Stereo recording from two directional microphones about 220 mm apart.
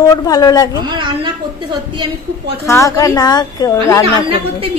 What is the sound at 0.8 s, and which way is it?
Speech, 20° right (ahead or behind).